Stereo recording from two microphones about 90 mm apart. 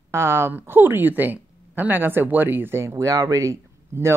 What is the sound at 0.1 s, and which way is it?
A woman's voice, 30° right (ahead or behind).